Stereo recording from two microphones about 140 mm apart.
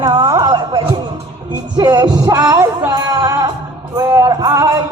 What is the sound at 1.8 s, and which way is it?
Music, 30° right (ahead or behind).